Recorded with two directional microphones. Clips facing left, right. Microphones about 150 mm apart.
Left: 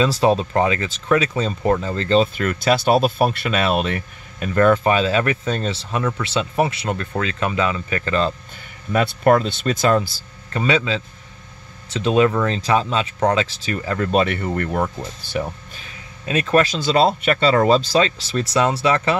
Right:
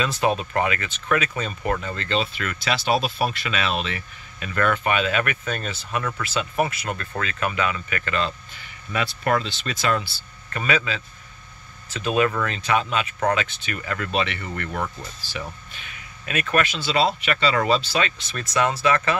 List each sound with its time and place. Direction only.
0.0 s speech: 30° left (ahead or behind); by 4.5 s 50° left (ahead or behind)
4.6 s speech: 35° left (ahead or behind)
8.9 s speech: 45° left (ahead or behind)
10.5 s speech: 25° left (ahead or behind); by 15.8 s 45° left (ahead or behind)
15.8 s speech: 25° left (ahead or behind)
18.0 s speech: 30° left (ahead or behind)